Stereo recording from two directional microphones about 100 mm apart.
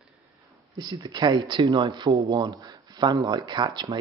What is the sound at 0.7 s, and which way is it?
Speech, 45° right (ahead or behind).